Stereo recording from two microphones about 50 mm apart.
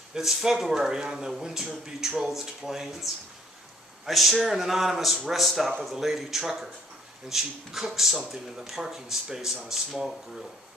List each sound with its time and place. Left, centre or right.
0.1 s a man's voice: centre